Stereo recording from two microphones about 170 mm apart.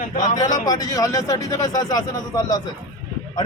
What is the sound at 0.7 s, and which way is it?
A man's voice, 20° left (ahead or behind).